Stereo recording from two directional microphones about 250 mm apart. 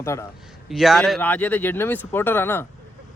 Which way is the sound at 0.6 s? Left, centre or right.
Centre.